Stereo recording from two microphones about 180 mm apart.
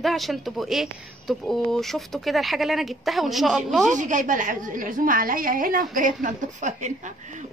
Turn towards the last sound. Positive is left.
turn(degrees=-45)  # may be behind; listen again after turning